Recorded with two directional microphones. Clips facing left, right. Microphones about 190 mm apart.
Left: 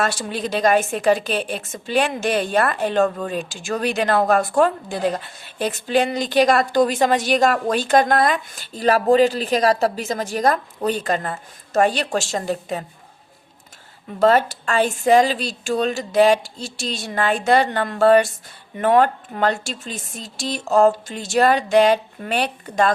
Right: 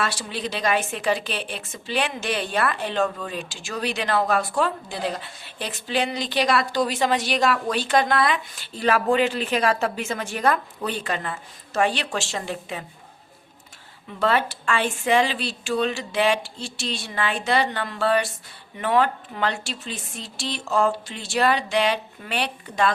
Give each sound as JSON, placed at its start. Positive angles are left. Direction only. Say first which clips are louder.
{"t": 0.0, "sound": "a woman's voice", "louder": "left 4 dB", "side_deg": 45}
{"t": 14.1, "sound": "a woman's voice", "louder": "left 6 dB", "side_deg": 40}